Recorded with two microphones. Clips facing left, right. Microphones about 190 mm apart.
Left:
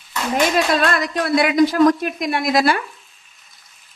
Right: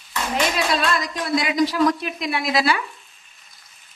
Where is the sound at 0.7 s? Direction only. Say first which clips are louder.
Left 4 dB; 55° left (ahead or behind).